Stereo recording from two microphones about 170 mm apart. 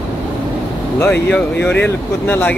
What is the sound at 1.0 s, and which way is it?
Speech, 15° left (ahead or behind).